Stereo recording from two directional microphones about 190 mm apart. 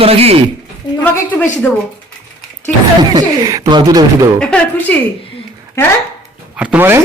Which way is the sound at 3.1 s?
20° right (ahead or behind).